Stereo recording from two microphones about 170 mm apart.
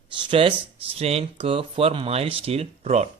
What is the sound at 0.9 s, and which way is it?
Speech, 35° right (ahead or behind).